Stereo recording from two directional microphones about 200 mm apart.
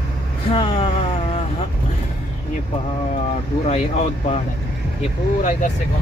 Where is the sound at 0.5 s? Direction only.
25° left (ahead or behind).